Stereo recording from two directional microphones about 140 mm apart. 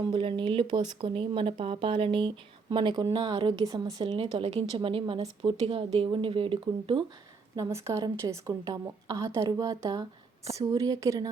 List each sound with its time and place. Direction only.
0.0 s speech: 35° right (ahead or behind)
7.5 s a woman's voice: 20° right (ahead or behind)